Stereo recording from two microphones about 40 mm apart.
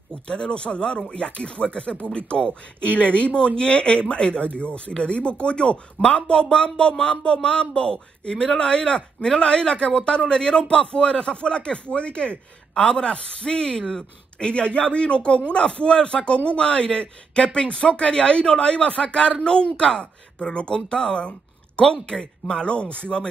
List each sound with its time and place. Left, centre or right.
0.1 s a man's voice: left